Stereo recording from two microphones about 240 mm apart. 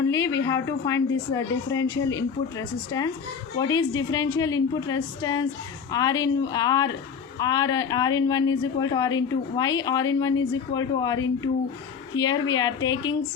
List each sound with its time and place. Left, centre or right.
0.1 s a woman's voice: centre